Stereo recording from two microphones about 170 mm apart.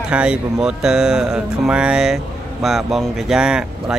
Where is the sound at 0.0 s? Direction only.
5° right (ahead or behind).